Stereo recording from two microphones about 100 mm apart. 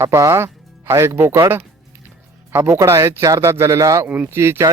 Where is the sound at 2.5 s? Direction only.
25° right (ahead or behind).